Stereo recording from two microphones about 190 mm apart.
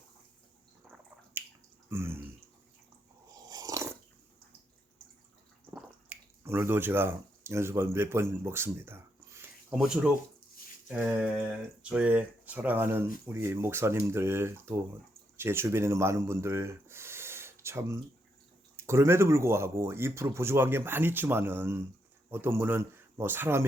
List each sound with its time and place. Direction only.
0.9 s a sound: 10° right (ahead or behind)
1.9 s speech: 10° right (ahead or behind)
3.3 s dog: 20° right (ahead or behind)
5.7 s speech: 15° right (ahead or behind)
9.4 s a sound: 10° right (ahead or behind)
11.8 s speech: 5° right (ahead or behind)